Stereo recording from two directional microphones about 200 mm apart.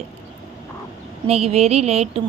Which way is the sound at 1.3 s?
30° right (ahead or behind).